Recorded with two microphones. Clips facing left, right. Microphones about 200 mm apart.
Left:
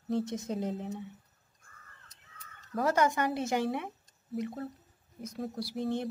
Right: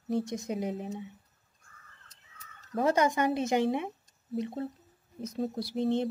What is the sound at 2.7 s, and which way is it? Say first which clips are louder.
A woman's voice: right 2 dB; 20° right (ahead or behind).